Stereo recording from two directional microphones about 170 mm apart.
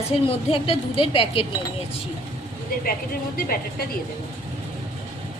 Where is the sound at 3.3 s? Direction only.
60° left (ahead or behind).